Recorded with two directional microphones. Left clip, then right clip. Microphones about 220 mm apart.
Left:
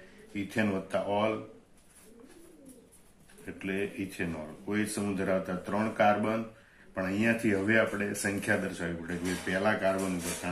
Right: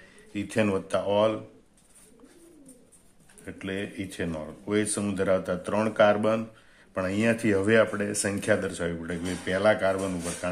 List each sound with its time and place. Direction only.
0.3 s speech: 50° right (ahead or behind)
3.4 s speech: 50° right (ahead or behind)